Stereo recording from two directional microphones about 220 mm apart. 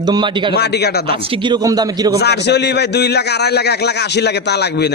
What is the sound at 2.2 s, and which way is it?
A man's voice, 50° left (ahead or behind).